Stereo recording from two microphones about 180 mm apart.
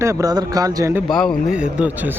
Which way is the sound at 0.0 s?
15° right (ahead or behind).